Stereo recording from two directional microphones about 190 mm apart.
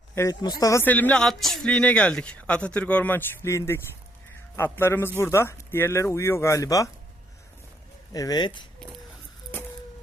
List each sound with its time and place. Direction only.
0.2 s speech: 20° left (ahead or behind)
8.1 s speech: 20° left (ahead or behind)